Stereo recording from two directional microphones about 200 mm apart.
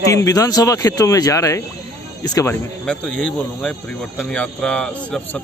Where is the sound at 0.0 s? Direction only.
15° left (ahead or behind).